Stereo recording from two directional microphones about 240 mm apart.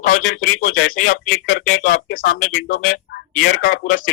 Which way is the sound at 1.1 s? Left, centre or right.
Left.